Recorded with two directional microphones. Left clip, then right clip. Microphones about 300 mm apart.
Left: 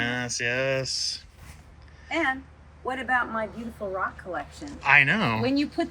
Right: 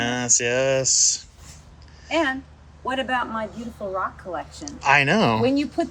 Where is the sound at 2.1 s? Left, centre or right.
Right.